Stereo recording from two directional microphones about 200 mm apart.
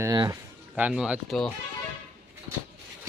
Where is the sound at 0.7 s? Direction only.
5° right (ahead or behind).